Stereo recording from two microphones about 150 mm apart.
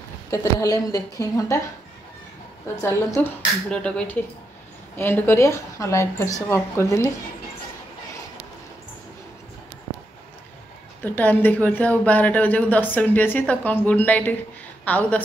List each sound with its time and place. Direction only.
0.3 s a woman's voice: 20° left (ahead or behind)
2.8 s a woman's voice: 20° left (ahead or behind)
3.6 s a woman's voice: 5° left (ahead or behind)
11.1 s speech: 10° left (ahead or behind)